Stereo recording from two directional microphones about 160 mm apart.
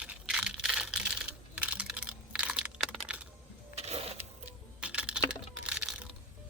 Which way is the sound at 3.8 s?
40° right (ahead or behind).